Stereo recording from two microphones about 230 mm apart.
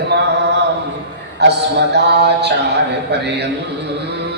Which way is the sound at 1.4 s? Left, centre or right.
Right.